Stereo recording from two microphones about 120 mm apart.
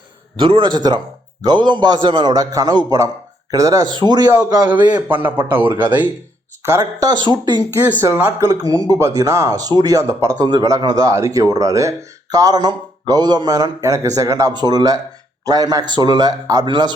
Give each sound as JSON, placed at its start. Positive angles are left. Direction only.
{"t": 0.3, "sound": "speech", "side_deg": -45}
{"t": 5.0, "sound": "speech", "side_deg": -15}
{"t": 8.0, "sound": "speech", "side_deg": -25}
{"t": 14.5, "sound": "speech", "side_deg": -35}